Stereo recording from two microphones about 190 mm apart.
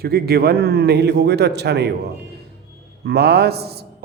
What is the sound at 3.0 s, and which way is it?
Speech, 60° right (ahead or behind).